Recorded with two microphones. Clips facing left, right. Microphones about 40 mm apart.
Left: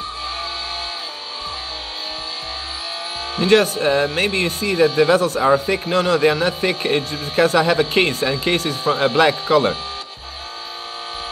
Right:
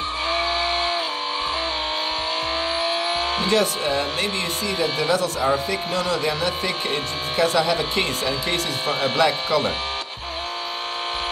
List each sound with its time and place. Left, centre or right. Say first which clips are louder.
0.3 s vehicle: right 5 dB; right
3.4 s speech: left 8 dB; left